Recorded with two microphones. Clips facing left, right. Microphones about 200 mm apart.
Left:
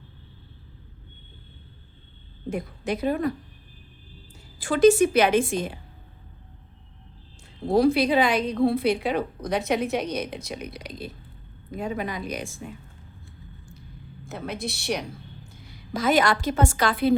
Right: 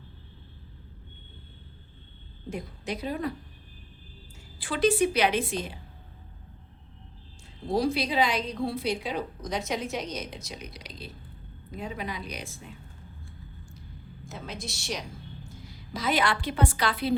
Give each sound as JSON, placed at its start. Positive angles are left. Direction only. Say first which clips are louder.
{"t": 2.5, "sound": "a woman's voice", "louder": "left 6 dB", "side_deg": 55}
{"t": 4.5, "sound": "a woman's voice", "louder": "left 8 dB", "side_deg": 45}
{"t": 7.7, "sound": "a woman's voice", "louder": "left 7 dB", "side_deg": 55}
{"t": 14.3, "sound": "a woman's voice", "louder": "left 7 dB", "side_deg": 60}
{"t": 15.9, "sound": "a woman's voice", "louder": "left 6 dB", "side_deg": 50}